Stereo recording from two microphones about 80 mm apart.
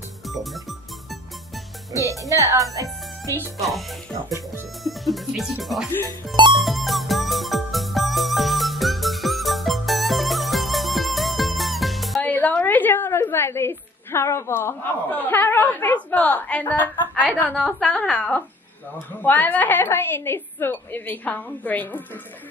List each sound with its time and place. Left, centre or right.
0.3 s speech: centre
2.0 s speech: right
4.8 s speech: centre
6.5 s music: centre
12.2 s a woman's voice: left
17.6 s a woman's voice: centre
17.9 s a woman's voice: centre